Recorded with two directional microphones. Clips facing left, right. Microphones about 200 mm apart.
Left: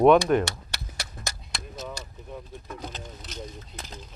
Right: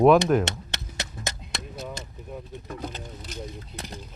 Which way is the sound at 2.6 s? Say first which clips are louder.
Right 3 dB; 50° right (ahead or behind).